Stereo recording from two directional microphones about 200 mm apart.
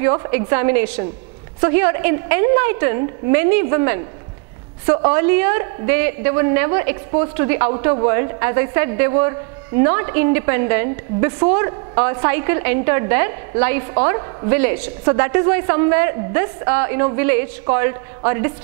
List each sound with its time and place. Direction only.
0.0 s a woman's voice: 15° right (ahead or behind)